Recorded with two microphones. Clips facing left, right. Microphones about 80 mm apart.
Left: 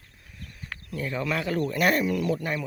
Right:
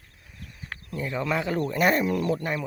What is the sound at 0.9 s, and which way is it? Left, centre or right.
Speech, centre.